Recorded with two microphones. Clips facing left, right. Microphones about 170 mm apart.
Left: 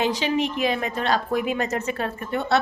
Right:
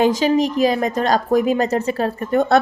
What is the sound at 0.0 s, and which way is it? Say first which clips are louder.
A woman's voice: right 7 dB; 45° right (ahead or behind).